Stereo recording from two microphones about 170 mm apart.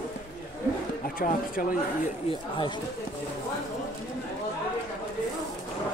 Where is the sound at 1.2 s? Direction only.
55° left (ahead or behind).